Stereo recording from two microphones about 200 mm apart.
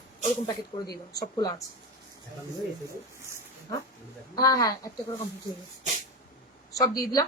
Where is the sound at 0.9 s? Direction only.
20° left (ahead or behind).